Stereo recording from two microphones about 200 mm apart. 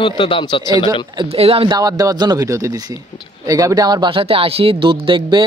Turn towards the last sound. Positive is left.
turn(degrees=-25)  # may be behind; listen again after turning